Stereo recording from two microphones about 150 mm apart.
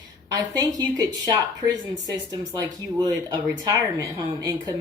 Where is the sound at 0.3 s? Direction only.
25° right (ahead or behind).